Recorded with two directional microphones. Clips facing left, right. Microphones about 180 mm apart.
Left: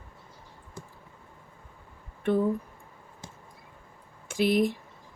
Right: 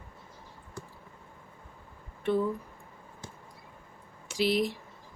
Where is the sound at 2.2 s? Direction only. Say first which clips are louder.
Left 2 dB; 50° left (ahead or behind).